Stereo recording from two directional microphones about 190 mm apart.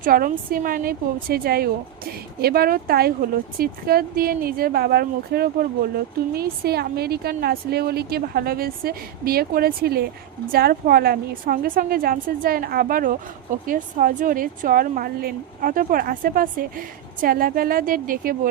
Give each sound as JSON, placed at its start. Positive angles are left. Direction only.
{"t": 0.0, "sound": "a woman's voice", "side_deg": -45}